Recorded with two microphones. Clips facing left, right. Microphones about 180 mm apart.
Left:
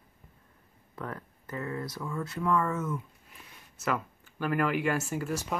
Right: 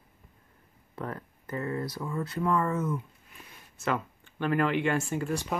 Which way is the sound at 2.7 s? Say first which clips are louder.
Right 3 dB; 15° right (ahead or behind).